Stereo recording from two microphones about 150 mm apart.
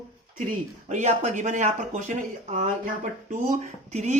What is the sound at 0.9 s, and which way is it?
Speech, 50° right (ahead or behind).